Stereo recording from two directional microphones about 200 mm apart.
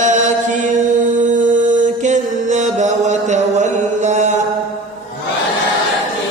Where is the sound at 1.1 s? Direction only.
40° right (ahead or behind).